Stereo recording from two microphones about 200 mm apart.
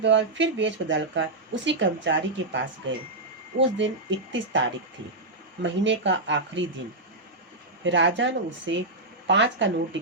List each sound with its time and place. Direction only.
0.0 s speech: 65° right (ahead or behind)
7.9 s speech: 65° right (ahead or behind)